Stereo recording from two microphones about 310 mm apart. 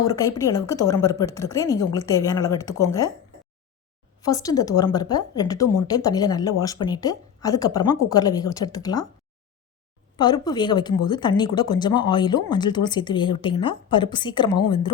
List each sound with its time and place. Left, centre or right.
0.1 s speech: centre
4.2 s speech: centre
10.2 s speech: centre